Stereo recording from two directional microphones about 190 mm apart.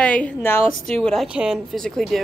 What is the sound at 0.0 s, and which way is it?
Speech, 5° left (ahead or behind).